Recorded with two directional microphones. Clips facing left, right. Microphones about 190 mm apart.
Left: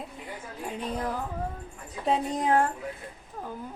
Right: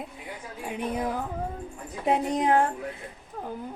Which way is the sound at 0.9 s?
15° right (ahead or behind).